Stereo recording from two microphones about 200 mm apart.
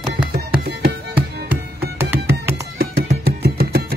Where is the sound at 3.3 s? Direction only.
50° right (ahead or behind).